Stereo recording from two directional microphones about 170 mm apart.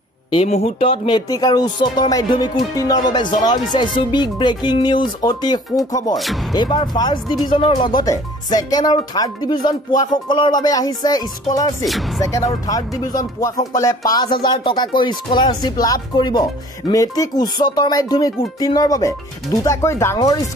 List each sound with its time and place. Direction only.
0.3 s speech: 35° left (ahead or behind); by 20.2 s 15° left (ahead or behind)